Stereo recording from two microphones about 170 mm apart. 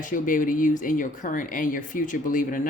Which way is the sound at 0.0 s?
50° left (ahead or behind).